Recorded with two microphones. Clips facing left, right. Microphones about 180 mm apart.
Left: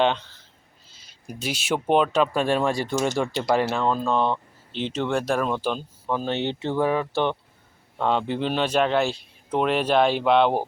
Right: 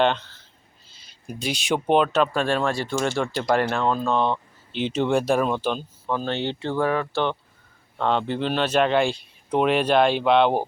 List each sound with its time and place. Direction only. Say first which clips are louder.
1.3 s speech: right 1 dB; 5° left (ahead or behind)
4.9 s speech: right 3 dB; 15° right (ahead or behind)
5.5 s speech: right 1 dB; 5° left (ahead or behind)